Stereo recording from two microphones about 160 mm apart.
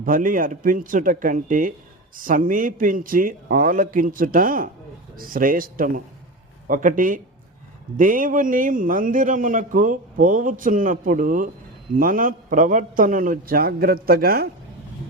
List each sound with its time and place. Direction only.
0.0 s a man's voice: 60° right (ahead or behind)